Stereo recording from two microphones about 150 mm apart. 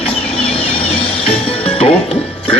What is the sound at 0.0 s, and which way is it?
Music, 40° left (ahead or behind).